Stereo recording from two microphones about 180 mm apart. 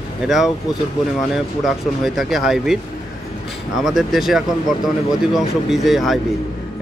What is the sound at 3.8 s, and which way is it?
Speech, centre (ahead or behind).